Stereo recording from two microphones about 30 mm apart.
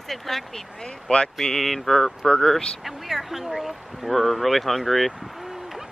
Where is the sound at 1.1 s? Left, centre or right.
Left.